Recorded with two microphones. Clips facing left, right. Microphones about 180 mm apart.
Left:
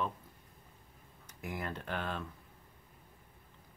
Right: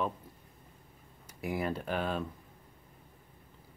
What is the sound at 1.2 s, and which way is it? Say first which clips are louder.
Speech: right 7 dB; 10° right (ahead or behind).